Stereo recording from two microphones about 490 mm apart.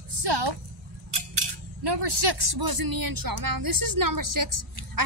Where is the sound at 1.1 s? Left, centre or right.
Right.